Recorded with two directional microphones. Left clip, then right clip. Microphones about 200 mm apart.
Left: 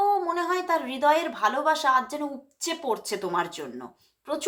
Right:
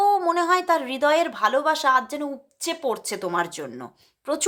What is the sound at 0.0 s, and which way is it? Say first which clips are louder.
A woman's voice: right 4 dB; 40° right (ahead or behind).